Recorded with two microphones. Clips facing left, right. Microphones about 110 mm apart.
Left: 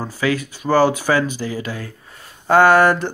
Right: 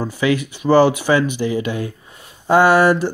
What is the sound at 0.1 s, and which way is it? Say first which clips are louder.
Speech: even; 40° left (ahead or behind).